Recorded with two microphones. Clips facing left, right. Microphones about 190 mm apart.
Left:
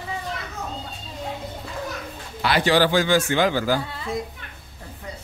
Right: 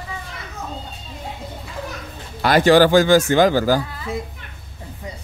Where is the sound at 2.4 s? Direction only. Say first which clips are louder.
Right 6 dB; 45° right (ahead or behind).